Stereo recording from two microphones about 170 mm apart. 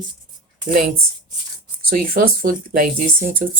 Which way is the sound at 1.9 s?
60° right (ahead or behind).